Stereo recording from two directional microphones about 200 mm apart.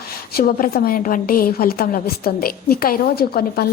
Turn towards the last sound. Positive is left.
turn(degrees=50)  # may be behind; listen again after turning